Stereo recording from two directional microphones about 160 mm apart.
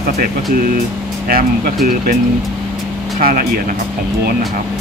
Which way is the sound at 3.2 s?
65° right (ahead or behind).